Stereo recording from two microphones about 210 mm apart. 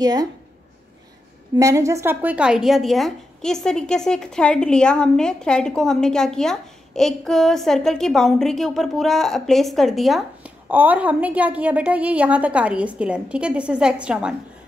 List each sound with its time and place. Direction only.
0.0 s a woman's voice: 20° right (ahead or behind)
1.6 s a woman's voice: 15° right (ahead or behind)